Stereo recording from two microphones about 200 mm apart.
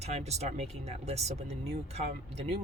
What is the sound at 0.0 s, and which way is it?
Speech, 35° right (ahead or behind).